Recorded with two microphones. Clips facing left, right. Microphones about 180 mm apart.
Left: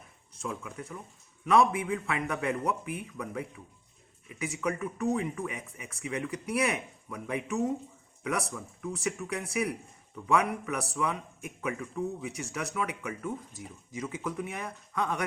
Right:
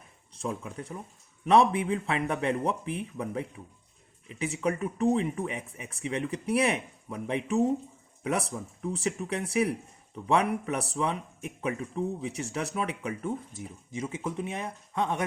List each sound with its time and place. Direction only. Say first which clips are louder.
0.4 s speech: right 3 dB; 30° right (ahead or behind)